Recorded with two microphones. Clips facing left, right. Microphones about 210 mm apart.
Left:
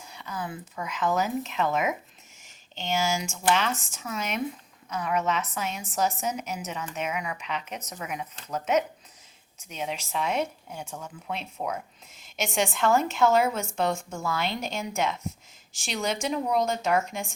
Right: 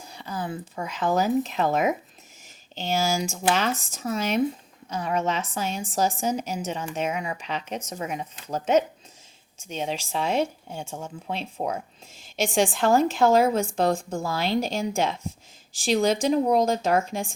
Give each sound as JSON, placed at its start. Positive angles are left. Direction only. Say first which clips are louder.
{"t": 0.0, "sound": "speech", "louder": "right 3 dB", "side_deg": -35}